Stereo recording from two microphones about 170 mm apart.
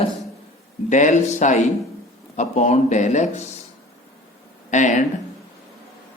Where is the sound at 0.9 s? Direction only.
45° left (ahead or behind).